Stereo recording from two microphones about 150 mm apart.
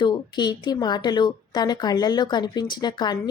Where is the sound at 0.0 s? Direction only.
30° left (ahead or behind).